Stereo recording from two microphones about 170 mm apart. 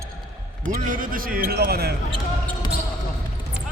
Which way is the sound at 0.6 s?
50° right (ahead or behind).